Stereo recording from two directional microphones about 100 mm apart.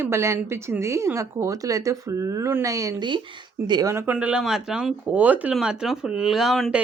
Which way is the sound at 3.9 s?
15° right (ahead or behind).